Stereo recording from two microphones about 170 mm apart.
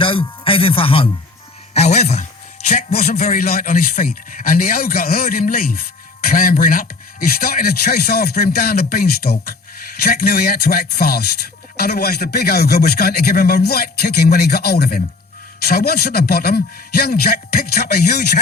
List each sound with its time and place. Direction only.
0.0 s speech: 30° left (ahead or behind)
2.9 s speech: 55° left (ahead or behind)